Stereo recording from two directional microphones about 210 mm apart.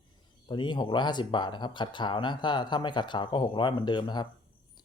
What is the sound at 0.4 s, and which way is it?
Speech, 20° left (ahead or behind).